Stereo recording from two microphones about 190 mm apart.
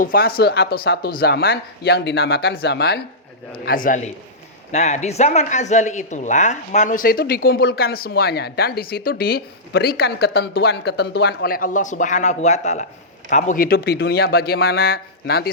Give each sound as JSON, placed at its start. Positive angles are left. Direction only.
{"t": 0.0, "sound": "speech", "side_deg": 50}
{"t": 3.5, "sound": "speech", "side_deg": 50}